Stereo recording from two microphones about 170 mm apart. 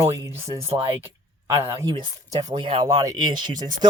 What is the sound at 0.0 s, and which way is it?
Speech, 15° right (ahead or behind).